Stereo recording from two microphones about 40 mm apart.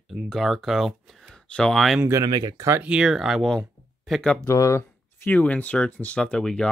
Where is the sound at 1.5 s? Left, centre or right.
Left.